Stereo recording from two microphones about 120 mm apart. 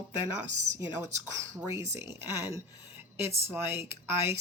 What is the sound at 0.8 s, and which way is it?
Speech, 25° right (ahead or behind).